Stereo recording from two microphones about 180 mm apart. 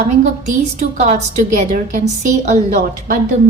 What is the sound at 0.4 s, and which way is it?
A woman's voice, 40° right (ahead or behind).